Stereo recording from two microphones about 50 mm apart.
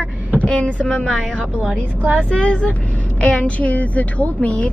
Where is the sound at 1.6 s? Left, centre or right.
Right.